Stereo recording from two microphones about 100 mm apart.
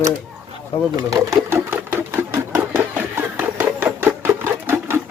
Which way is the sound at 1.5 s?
20° right (ahead or behind).